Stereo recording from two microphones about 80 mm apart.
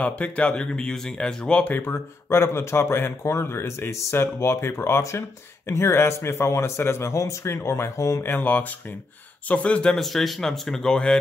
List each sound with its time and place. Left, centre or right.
0.0 s speech: centre
1.7 s speech: left
8.3 s speech: left
9.9 s speech: centre